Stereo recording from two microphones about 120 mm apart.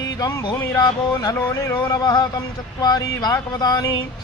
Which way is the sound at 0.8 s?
30° left (ahead or behind).